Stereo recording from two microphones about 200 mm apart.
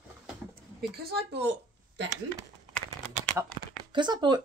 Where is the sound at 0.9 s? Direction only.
55° right (ahead or behind).